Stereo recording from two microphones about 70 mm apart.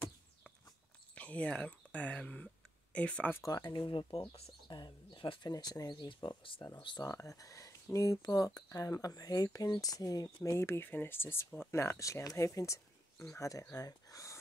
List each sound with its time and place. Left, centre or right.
1.1 s speech: centre
3.4 s speech: left
6.7 s speech: left
10.6 s speech: left